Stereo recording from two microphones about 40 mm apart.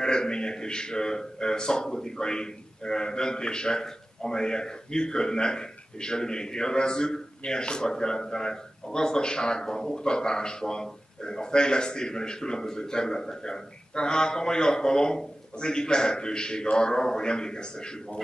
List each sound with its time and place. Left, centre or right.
0.0 s a man's voice: centre